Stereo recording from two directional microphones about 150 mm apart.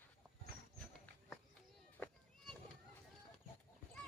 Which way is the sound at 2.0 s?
Centre (ahead or behind).